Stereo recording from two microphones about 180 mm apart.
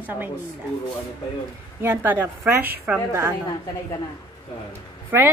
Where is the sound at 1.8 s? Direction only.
10° right (ahead or behind).